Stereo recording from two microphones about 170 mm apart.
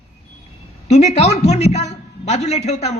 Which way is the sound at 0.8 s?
40° left (ahead or behind).